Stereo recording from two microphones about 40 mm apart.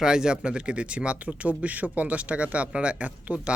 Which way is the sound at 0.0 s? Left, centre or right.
Centre.